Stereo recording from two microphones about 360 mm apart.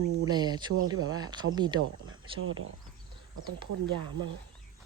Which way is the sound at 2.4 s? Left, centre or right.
Right.